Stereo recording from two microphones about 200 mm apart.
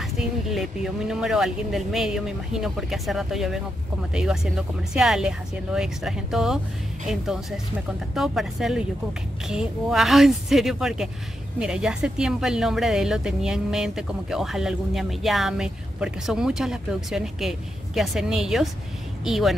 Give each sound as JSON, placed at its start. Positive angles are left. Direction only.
{"t": 0.0, "sound": "speech", "side_deg": 0}